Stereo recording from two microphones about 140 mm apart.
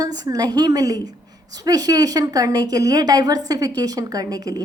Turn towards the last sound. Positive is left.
turn(degrees=-25)  # may be behind; listen again after turning